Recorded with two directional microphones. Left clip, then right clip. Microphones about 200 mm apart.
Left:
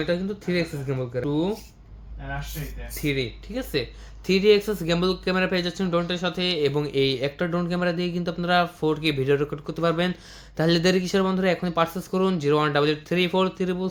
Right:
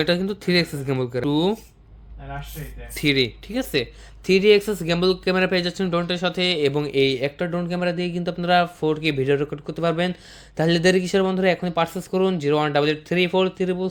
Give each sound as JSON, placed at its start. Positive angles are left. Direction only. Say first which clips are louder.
{"t": 0.0, "sound": "speech", "louder": "right 4 dB", "side_deg": -45}
{"t": 3.0, "sound": "speech", "louder": "right 7 dB", "side_deg": -45}